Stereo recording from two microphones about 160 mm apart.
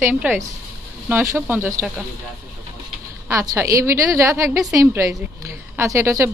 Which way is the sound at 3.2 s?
20° right (ahead or behind).